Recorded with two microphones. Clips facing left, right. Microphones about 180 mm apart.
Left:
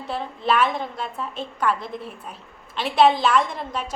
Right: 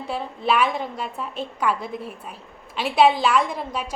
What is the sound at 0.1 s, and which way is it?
A woman's voice, 10° right (ahead or behind).